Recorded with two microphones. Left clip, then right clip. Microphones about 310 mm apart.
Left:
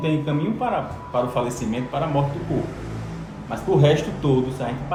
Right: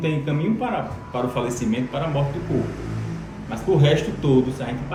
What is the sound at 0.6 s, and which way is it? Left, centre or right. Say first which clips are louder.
A man's voice: left 2 dB; centre.